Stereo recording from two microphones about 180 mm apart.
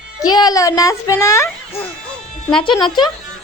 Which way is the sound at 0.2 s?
20° left (ahead or behind).